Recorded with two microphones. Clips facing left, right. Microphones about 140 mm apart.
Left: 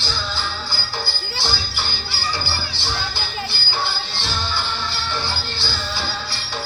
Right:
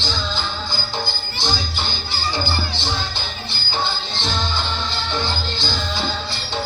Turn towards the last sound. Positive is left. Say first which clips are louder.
# right 3 dB
turn(degrees=-20)  # may be behind; listen again after turning